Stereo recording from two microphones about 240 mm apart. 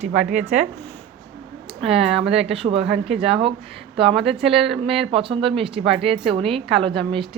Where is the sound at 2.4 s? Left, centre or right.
Right.